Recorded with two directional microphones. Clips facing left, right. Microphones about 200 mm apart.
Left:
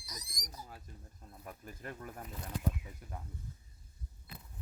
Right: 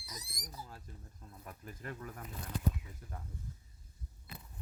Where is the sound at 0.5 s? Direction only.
20° left (ahead or behind).